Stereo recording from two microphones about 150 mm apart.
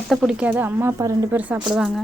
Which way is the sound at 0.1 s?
5° right (ahead or behind).